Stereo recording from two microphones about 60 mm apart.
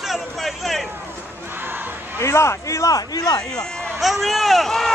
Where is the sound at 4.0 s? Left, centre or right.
Centre.